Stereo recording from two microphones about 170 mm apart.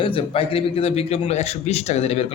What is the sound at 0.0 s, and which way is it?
A man's voice, 30° left (ahead or behind).